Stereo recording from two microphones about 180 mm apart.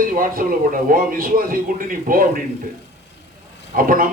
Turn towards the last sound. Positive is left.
turn(degrees=-50)  # may be behind; listen again after turning